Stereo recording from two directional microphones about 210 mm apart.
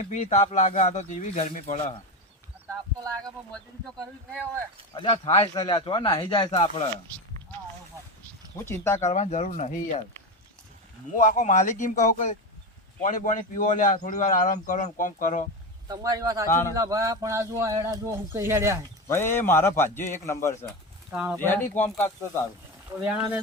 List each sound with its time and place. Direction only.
0.0 s a man's voice: 35° left (ahead or behind)
2.6 s speech: 15° right (ahead or behind)
4.9 s speech: 25° left (ahead or behind)
8.5 s speech: 10° left (ahead or behind)
9.0 s a man's voice: 35° left (ahead or behind)
11.1 s a man's voice: 35° left (ahead or behind)
15.9 s speech: 15° right (ahead or behind)
16.5 s speech: 10° left (ahead or behind)
16.7 s speech: 15° right (ahead or behind)
19.0 s speech: 10° left (ahead or behind)
21.1 s speech: 5° right (ahead or behind)
21.3 s speech: 10° left (ahead or behind)
23.1 s speech: 5° right (ahead or behind)